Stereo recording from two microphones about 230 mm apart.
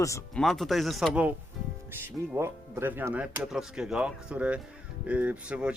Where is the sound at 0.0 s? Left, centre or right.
Centre.